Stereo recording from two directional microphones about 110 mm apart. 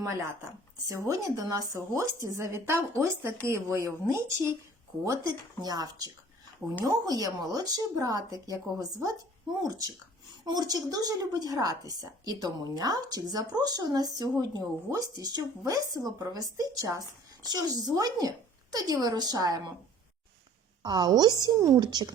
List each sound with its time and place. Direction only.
0.9 s speech: 30° right (ahead or behind)
5.0 s a woman's voice: 35° right (ahead or behind)
20.8 s a woman's voice: 40° right (ahead or behind)